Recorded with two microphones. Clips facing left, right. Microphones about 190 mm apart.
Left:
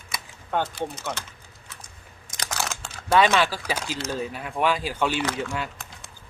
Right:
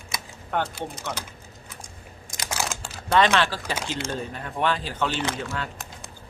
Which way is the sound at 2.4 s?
Centre (ahead or behind).